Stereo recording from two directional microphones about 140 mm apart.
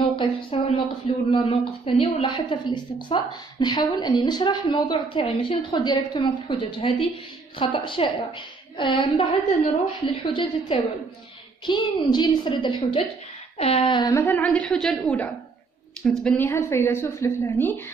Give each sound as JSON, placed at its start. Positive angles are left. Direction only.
{"t": 0.1, "sound": "a woman's voice", "side_deg": 40}
{"t": 14.1, "sound": "a woman's voice", "side_deg": 15}
{"t": 14.4, "sound": "a woman's voice", "side_deg": 5}
{"t": 16.3, "sound": "a woman's voice", "side_deg": 15}